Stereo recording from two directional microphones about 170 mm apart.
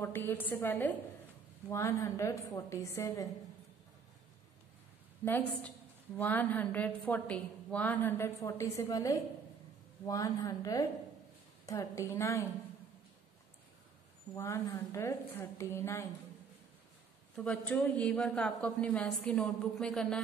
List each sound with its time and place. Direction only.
0.0 s a woman's voice: 15° left (ahead or behind)
5.2 s a woman's voice: 10° left (ahead or behind)
14.3 s a woman's voice: 15° left (ahead or behind)
17.4 s speech: 5° left (ahead or behind)